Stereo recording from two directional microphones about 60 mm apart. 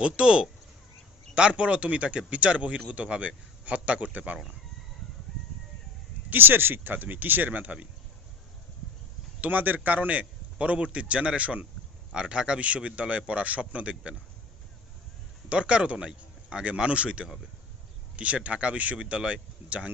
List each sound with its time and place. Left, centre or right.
0.0 s a man's voice: centre
6.3 s speech: right
9.4 s a man's voice: right
15.5 s a man's voice: centre